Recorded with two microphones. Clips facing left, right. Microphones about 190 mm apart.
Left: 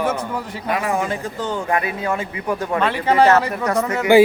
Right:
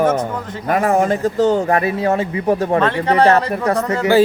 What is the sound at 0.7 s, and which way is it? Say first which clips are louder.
Speech: right 6 dB; 45° right (ahead or behind).